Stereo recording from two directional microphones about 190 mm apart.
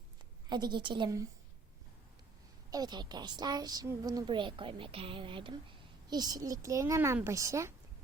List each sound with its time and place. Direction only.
0.4 s a woman's voice: 20° right (ahead or behind)
2.6 s a woman's voice: 20° right (ahead or behind)